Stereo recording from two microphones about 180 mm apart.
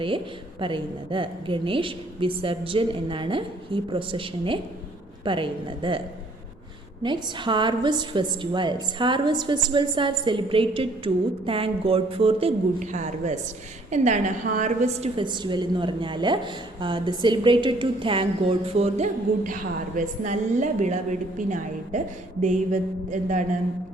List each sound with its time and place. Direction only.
0.6 s a woman's voice: 30° right (ahead or behind)
7.0 s a woman's voice: 25° right (ahead or behind); by 15.1 s 40° right (ahead or behind)
15.1 s a woman's voice: 25° right (ahead or behind); by 23.4 s 45° right (ahead or behind)